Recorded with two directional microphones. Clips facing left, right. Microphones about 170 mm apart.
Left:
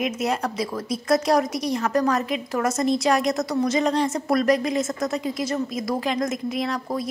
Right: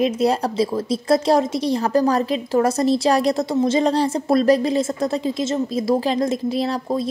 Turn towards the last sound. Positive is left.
turn(degrees=-30)  # may be behind; listen again after turning